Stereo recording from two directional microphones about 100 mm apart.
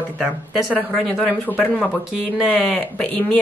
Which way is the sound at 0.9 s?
5° left (ahead or behind).